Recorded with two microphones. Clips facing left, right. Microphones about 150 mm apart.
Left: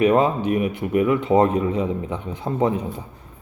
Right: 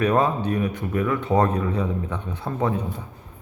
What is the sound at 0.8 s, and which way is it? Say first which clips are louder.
Speech: left 5 dB; 15° left (ahead or behind).